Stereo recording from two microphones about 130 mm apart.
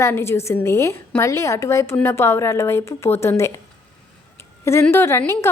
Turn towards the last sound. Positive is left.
turn(degrees=20)  # may be behind; listen again after turning